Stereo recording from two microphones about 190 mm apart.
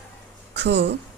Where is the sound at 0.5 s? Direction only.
65° right (ahead or behind).